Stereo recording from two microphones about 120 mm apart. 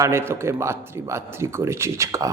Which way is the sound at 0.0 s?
20° right (ahead or behind).